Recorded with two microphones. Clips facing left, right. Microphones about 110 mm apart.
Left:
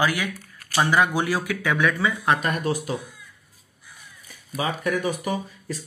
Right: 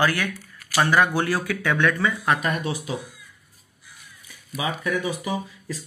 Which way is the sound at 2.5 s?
45° left (ahead or behind).